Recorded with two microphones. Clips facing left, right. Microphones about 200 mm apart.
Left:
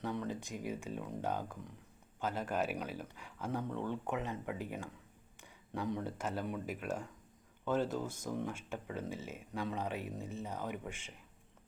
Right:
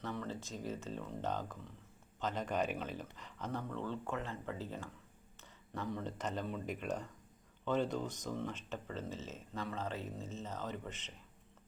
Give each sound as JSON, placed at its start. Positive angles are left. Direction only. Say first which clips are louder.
{"t": 0.0, "sound": "speech", "louder": "left 3 dB", "side_deg": 15}